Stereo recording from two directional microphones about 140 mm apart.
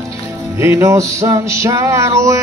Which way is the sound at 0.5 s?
20° right (ahead or behind).